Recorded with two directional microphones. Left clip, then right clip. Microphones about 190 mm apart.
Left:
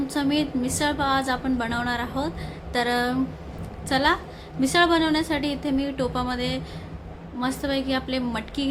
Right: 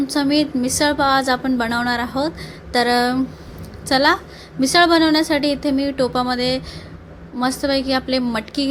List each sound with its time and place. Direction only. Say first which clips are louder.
0.1 s a woman's voice: right 6 dB; 30° right (ahead or behind)